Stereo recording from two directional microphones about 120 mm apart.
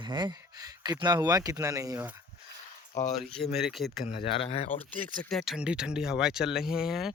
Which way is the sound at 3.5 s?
Centre (ahead or behind).